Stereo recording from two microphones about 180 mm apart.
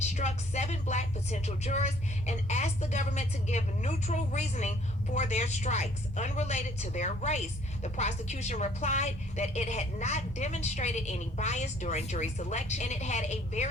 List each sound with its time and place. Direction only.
0.0 s a woman's voice: 40° left (ahead or behind)